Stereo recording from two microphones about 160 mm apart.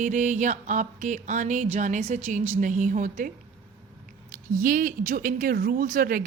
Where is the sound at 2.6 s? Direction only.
55° right (ahead or behind).